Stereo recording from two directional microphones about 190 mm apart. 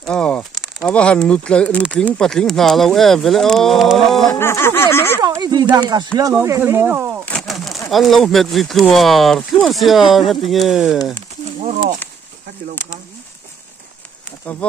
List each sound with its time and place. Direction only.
0.0 s speech: 5° left (ahead or behind)
4.4 s a sound: 15° left (ahead or behind)
5.2 s speech: 20° right (ahead or behind)
7.2 s bird: centre (ahead or behind)
7.9 s speech: centre (ahead or behind)
11.1 s a sound: 40° right (ahead or behind)
14.4 s speech: 10° left (ahead or behind)